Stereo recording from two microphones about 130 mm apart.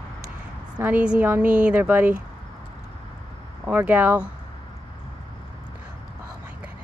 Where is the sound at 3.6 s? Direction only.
10° right (ahead or behind).